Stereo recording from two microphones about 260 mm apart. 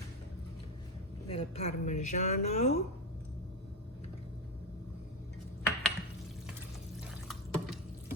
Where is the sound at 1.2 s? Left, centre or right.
Left.